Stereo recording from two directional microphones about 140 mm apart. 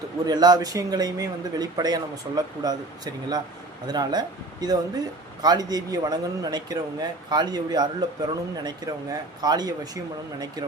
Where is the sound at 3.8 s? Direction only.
30° right (ahead or behind).